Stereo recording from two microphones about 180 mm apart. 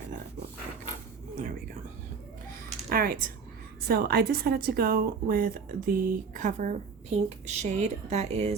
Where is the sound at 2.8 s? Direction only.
55° right (ahead or behind).